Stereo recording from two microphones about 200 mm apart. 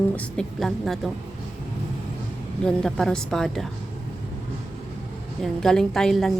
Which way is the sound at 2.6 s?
5° left (ahead or behind).